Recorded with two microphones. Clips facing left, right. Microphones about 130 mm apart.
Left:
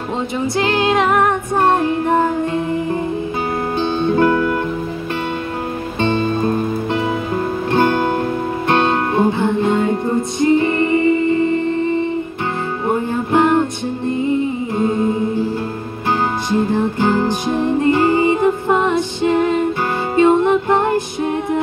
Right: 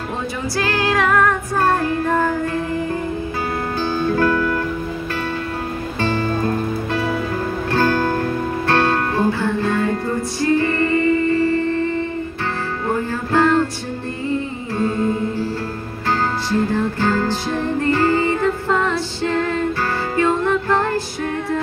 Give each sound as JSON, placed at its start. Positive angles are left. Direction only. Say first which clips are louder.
{"t": 0.6, "sound": "music", "louder": "left 3 dB", "side_deg": 20}
{"t": 5.9, "sound": "music", "louder": "left 3 dB", "side_deg": 20}
{"t": 14.2, "sound": "humming", "louder": "left 4 dB", "side_deg": 20}
{"t": 16.4, "sound": "music", "louder": "left 3 dB", "side_deg": 20}